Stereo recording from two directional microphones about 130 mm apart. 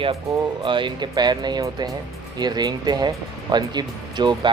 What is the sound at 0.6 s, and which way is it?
Speech, 40° right (ahead or behind).